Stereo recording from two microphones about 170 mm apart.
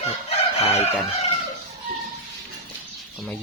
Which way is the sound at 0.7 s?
40° left (ahead or behind).